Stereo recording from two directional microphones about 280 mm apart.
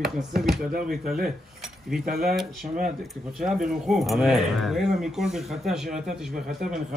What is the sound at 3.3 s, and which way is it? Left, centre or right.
Speech, centre.